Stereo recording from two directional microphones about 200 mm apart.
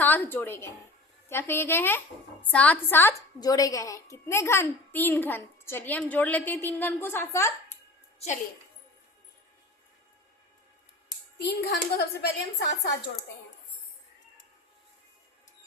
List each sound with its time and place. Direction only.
0.0 s a sound: 10° left (ahead or behind)
1.3 s a child's voice: 10° left (ahead or behind)
11.3 s a woman's voice: 55° left (ahead or behind)